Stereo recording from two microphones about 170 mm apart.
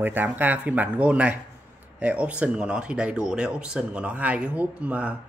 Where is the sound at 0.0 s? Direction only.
10° right (ahead or behind).